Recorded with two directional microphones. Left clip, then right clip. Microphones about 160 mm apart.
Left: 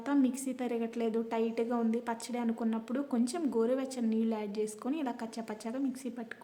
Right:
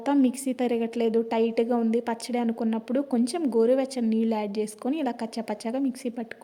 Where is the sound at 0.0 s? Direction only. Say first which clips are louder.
Right 7 dB; 30° right (ahead or behind).